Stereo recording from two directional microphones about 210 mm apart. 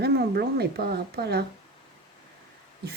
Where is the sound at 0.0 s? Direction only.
50° right (ahead or behind).